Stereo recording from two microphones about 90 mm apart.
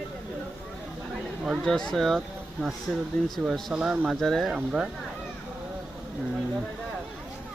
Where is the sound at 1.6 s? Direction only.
5° left (ahead or behind).